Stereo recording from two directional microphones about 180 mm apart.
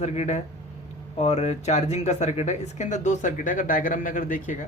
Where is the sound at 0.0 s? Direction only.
40° left (ahead or behind).